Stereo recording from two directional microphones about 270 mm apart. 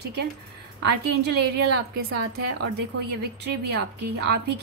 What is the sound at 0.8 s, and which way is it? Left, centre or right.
A woman's voice, right.